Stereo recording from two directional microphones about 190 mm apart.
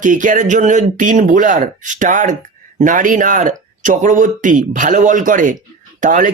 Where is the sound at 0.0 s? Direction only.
40° right (ahead or behind).